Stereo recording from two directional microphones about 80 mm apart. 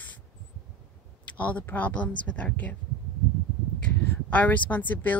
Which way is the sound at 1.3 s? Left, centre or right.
Centre.